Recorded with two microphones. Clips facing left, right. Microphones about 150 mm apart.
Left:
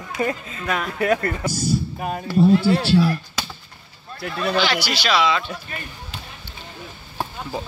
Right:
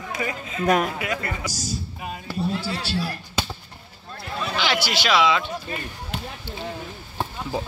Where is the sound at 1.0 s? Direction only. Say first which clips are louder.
Left 7 dB; 50° left (ahead or behind).